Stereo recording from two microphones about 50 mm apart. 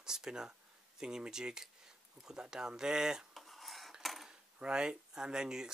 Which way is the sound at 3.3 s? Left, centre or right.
Centre.